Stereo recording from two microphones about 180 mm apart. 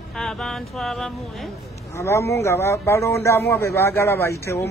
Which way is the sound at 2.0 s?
15° left (ahead or behind).